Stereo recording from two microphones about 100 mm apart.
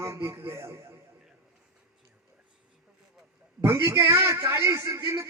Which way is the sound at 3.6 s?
25° right (ahead or behind).